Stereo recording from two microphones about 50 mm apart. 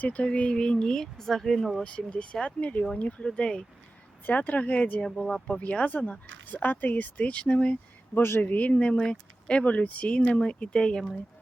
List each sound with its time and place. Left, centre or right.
0.0 s speech: left; by 1.8 s centre
1.8 s speech: left
4.3 s speech: left
8.1 s speech: left
8.4 s speech: left